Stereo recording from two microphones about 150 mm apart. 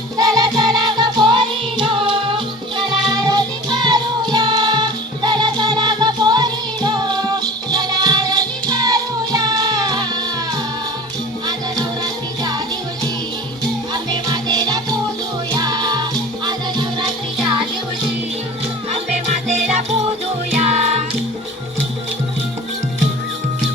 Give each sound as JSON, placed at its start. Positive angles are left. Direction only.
{"t": 0.2, "sound": "music", "side_deg": -25}
{"t": 12.4, "sound": "music", "side_deg": -25}
{"t": 13.9, "sound": "music", "side_deg": -30}
{"t": 18.9, "sound": "music", "side_deg": -50}